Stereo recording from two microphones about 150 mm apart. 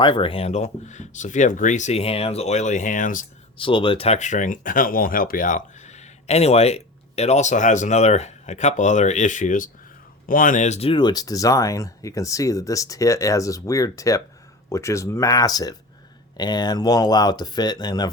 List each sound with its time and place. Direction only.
0.0 s speech: 35° left (ahead or behind); by 3.2 s 60° left (ahead or behind)
3.6 s speech: 35° left (ahead or behind)